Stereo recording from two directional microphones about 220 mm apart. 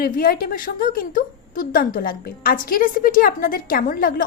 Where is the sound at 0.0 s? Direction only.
40° left (ahead or behind).